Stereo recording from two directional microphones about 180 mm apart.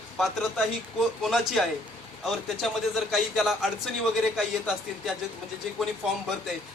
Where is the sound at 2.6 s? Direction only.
Centre (ahead or behind).